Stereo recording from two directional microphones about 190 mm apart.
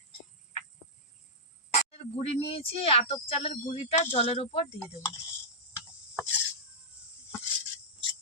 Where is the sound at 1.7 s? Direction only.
35° left (ahead or behind).